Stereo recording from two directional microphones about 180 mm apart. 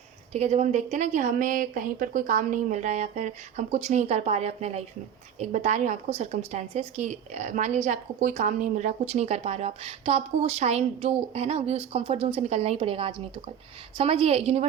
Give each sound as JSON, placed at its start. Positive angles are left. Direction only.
{"t": 0.3, "sound": "a woman's voice", "side_deg": -40}